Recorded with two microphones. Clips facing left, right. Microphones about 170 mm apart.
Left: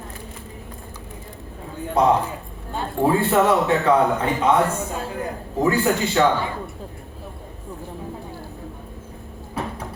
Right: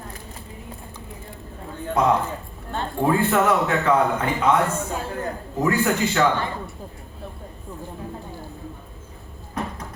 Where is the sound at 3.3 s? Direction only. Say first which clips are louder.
Left 2 dB; 30° left (ahead or behind).